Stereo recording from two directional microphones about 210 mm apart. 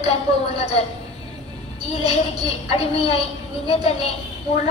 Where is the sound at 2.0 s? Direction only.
30° left (ahead or behind).